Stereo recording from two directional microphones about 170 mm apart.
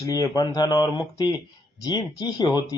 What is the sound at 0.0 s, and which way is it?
A man's voice, 20° left (ahead or behind).